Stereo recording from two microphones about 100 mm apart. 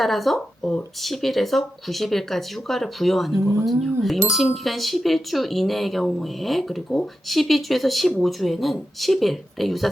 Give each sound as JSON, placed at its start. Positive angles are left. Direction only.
{"t": 0.0, "sound": "speech", "side_deg": 0}